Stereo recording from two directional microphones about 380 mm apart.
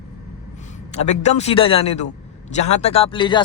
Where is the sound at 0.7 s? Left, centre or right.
Centre.